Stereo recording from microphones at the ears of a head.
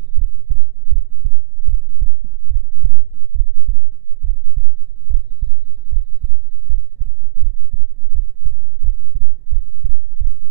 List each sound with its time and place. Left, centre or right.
0.1 s heart sounds: right